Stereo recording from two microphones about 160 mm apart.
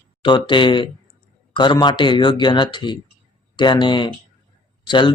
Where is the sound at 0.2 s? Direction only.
30° left (ahead or behind).